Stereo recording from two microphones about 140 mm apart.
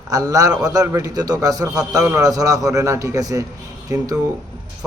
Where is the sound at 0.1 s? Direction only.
25° right (ahead or behind).